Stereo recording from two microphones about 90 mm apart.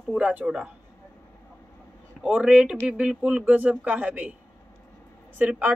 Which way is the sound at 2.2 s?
10° right (ahead or behind).